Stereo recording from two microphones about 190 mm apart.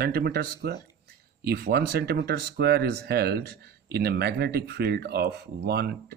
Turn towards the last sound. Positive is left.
turn(degrees=-55)  # may be behind; listen again after turning